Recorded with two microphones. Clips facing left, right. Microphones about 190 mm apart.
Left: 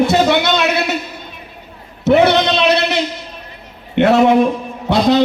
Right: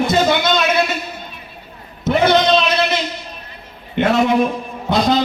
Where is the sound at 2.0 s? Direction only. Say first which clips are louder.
Left 4 dB; 70° left (ahead or behind).